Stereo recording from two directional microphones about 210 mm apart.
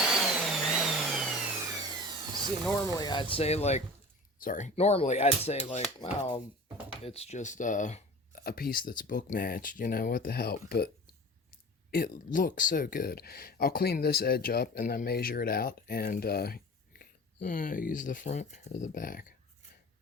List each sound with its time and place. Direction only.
0.0 s vehicle: centre (ahead or behind)
2.8 s speech: 15° left (ahead or behind)
6.0 s speech: 20° left (ahead or behind); by 10.8 s 50° left (ahead or behind)
11.9 s speech: 45° left (ahead or behind)